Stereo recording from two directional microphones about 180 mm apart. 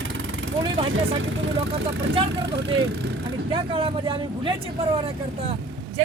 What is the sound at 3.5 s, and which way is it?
Speech, 30° right (ahead or behind).